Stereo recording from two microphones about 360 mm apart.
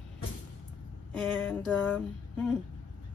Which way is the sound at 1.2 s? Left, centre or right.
Centre.